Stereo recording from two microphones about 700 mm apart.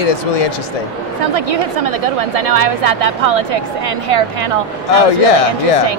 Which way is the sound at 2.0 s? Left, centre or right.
Right.